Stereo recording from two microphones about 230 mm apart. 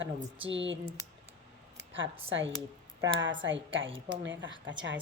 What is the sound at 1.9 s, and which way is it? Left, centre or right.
A woman's voice, right.